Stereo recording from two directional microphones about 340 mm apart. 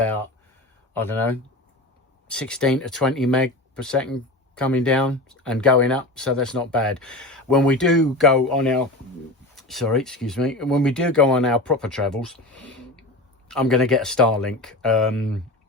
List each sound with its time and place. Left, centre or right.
0.9 s speech: centre
13.5 s speech: centre